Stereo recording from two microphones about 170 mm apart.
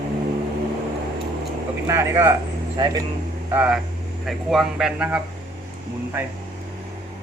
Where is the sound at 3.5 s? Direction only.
10° right (ahead or behind).